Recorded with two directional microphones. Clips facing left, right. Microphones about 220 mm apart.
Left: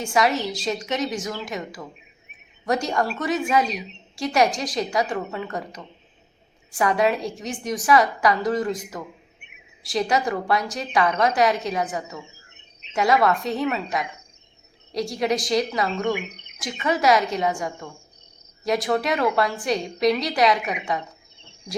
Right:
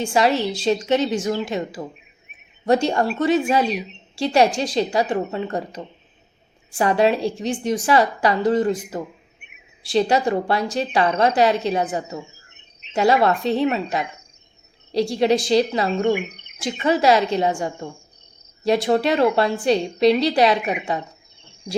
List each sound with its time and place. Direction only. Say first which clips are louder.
0.0 s a woman's voice: right 3 dB; 30° right (ahead or behind)